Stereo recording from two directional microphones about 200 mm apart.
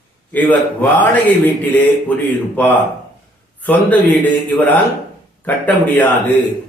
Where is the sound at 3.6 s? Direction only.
10° left (ahead or behind).